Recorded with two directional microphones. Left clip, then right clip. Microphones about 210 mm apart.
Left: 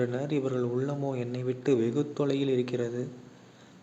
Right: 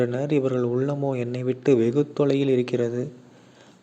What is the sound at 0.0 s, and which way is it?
A man's voice, 30° right (ahead or behind).